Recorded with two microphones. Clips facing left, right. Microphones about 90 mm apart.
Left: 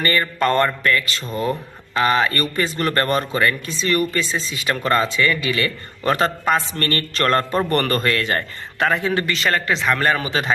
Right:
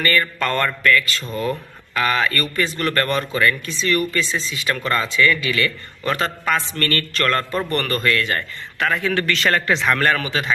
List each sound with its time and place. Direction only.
0.0 s a man's voice: 25° left (ahead or behind)
9.3 s speech: 5° left (ahead or behind)
10.2 s speech: 30° left (ahead or behind)